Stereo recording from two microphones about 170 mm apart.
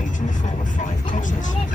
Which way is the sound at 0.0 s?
50° left (ahead or behind).